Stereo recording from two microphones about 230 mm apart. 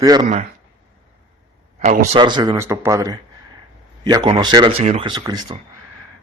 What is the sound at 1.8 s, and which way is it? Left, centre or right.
A man's voice, right.